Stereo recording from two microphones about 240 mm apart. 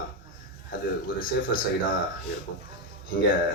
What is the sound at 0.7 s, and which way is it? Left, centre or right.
Speech, left.